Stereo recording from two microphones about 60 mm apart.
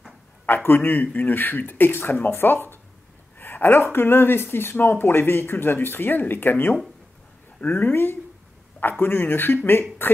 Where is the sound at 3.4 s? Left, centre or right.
Left.